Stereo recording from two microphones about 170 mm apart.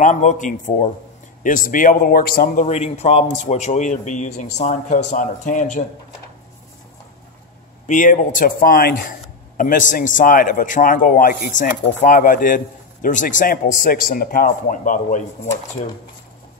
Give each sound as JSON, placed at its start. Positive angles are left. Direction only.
{"t": 0.0, "sound": "a man's voice", "side_deg": 45}
{"t": 2.6, "sound": "a man's voice", "side_deg": 40}
{"t": 7.8, "sound": "a man's voice", "side_deg": 50}